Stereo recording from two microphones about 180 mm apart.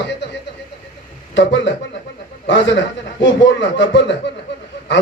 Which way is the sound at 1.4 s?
80° left.